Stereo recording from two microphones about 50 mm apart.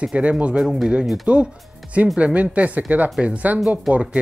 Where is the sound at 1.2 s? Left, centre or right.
Right.